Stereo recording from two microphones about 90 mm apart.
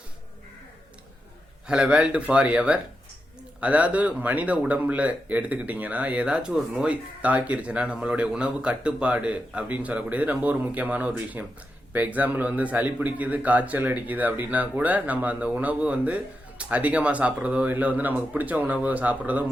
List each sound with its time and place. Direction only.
1.6 s speech: 10° right (ahead or behind)